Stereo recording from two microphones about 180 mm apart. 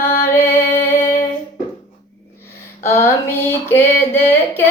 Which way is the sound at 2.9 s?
15° left (ahead or behind).